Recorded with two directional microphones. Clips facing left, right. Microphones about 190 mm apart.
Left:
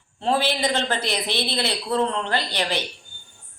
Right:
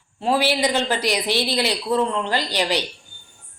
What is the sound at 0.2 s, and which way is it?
A man's voice, 10° right (ahead or behind).